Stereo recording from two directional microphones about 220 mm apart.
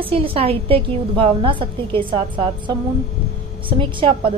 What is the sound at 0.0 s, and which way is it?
A woman's voice, 25° right (ahead or behind).